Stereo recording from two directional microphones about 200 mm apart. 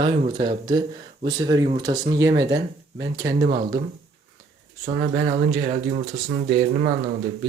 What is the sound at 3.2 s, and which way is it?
Speech, 55° right (ahead or behind).